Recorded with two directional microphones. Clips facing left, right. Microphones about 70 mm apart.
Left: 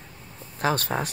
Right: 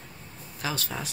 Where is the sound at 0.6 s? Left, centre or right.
Left.